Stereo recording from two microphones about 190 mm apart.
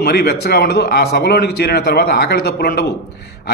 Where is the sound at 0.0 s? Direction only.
55° left (ahead or behind).